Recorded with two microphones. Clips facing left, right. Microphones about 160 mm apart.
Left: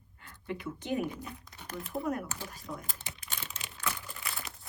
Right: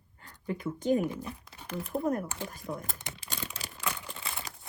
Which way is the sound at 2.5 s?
60° right (ahead or behind).